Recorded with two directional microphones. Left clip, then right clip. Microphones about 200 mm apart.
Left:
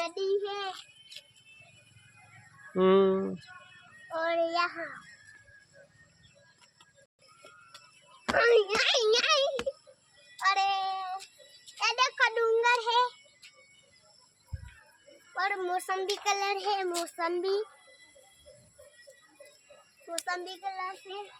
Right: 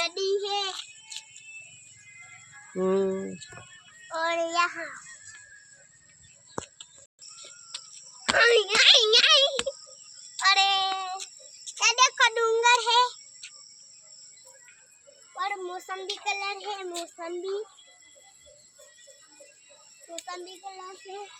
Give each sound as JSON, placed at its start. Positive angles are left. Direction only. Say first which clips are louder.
{"t": 0.0, "sound": "child singing", "louder": "right 3 dB", "side_deg": -15}
{"t": 2.7, "sound": "a child's voice", "louder": "left 3 dB", "side_deg": 15}
{"t": 4.1, "sound": "child singing", "louder": "right 2 dB", "side_deg": -5}
{"t": 7.7, "sound": "a sound", "louder": "right 10 dB", "side_deg": 5}
{"t": 10.3, "sound": "child singing", "louder": "right 5 dB", "side_deg": 0}
{"t": 11.7, "sound": "a sound", "louder": "right 6 dB", "side_deg": -30}
{"t": 15.4, "sound": "a child's voice", "louder": "left 2 dB", "side_deg": 30}
{"t": 20.1, "sound": "a child's voice", "louder": "left 4 dB", "side_deg": 20}